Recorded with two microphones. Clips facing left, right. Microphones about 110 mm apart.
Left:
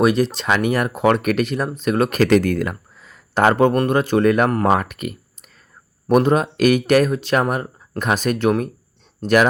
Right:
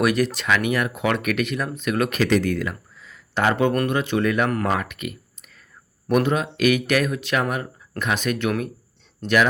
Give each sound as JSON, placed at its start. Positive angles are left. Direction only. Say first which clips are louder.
{"t": 0.0, "sound": "speech", "louder": "left 4 dB", "side_deg": 30}
{"t": 0.4, "sound": "speech", "louder": "left 3 dB", "side_deg": 40}
{"t": 4.6, "sound": "a sound", "louder": "left 6 dB", "side_deg": 45}
{"t": 6.1, "sound": "speech", "louder": "left 5 dB", "side_deg": 40}